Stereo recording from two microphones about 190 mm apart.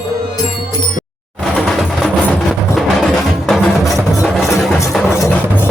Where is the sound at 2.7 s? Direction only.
Centre (ahead or behind).